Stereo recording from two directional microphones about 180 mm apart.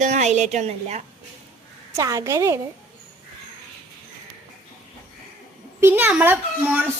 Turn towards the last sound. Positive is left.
turn(degrees=-10)  # may be behind; listen again after turning